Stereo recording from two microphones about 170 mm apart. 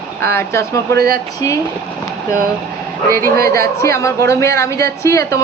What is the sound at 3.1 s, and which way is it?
A woman's voice, 15° left (ahead or behind).